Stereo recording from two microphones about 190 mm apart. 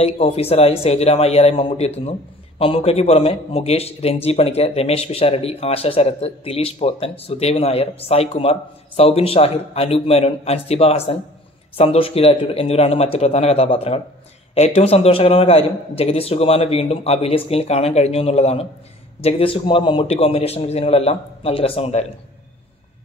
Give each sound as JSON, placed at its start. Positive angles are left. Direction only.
{"t": 0.0, "sound": "speech", "side_deg": 30}